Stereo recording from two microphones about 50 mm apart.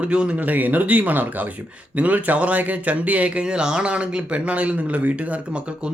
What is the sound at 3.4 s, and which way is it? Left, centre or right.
Speech, centre.